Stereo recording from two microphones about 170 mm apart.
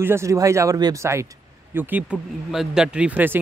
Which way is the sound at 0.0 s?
15° right (ahead or behind).